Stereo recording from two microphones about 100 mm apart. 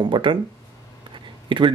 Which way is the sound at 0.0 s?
55° right (ahead or behind).